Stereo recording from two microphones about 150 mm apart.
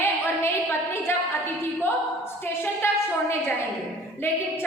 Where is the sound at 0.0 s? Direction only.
15° left (ahead or behind).